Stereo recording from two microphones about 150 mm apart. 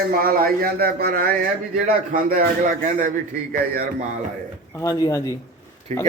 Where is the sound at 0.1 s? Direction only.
75° right (ahead or behind).